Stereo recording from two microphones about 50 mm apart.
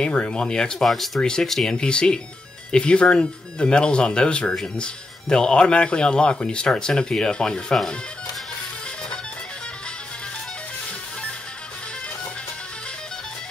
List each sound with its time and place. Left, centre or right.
0.0 s speech: left
0.8 s speech: centre